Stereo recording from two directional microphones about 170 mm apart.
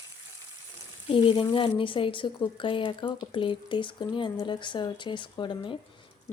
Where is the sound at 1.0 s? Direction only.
30° left (ahead or behind).